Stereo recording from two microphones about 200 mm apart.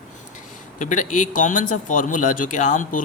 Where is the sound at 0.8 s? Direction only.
40° left (ahead or behind).